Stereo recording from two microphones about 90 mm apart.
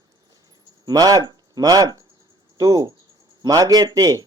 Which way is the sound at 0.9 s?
45° right (ahead or behind).